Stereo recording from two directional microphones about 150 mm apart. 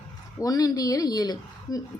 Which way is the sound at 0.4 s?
25° left (ahead or behind).